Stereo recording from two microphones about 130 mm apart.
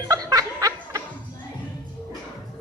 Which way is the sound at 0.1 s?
25° right (ahead or behind).